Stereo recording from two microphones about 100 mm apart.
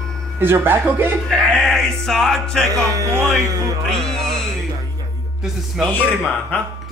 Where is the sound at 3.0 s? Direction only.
25° right (ahead or behind).